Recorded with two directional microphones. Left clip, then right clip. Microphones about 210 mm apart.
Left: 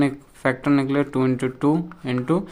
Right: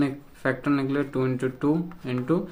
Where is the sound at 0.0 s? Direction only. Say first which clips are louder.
Left 5 dB; 40° left (ahead or behind).